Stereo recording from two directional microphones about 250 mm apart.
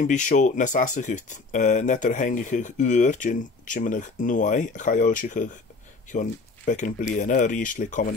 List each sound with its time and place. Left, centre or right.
0.0 s speech: left